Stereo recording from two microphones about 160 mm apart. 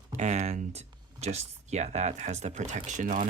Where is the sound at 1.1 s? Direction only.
45° right (ahead or behind).